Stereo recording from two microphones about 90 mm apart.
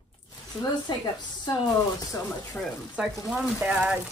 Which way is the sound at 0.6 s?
50° left (ahead or behind).